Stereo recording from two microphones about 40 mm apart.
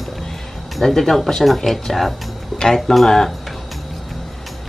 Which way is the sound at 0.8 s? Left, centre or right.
Centre.